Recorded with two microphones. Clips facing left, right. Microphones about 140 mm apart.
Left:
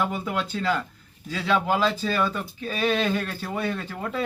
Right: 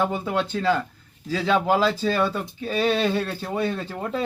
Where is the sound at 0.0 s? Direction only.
25° right (ahead or behind).